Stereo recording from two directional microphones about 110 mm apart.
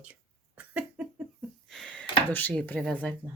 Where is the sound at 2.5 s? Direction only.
5° left (ahead or behind).